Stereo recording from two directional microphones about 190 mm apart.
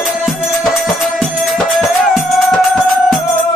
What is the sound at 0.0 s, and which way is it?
Music, centre (ahead or behind).